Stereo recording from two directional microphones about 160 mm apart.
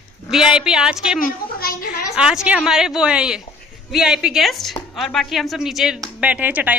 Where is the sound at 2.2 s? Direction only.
5° right (ahead or behind).